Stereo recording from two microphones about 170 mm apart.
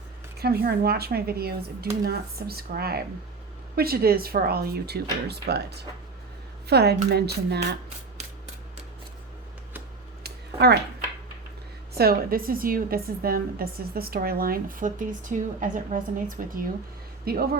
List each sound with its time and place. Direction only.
0.3 s a woman's voice: 65° right (ahead or behind)
10.2 s a sound: 70° right (ahead or behind)
11.9 s a woman's voice: 60° right (ahead or behind)